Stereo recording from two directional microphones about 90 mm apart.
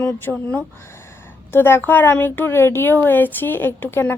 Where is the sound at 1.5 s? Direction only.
25° left (ahead or behind).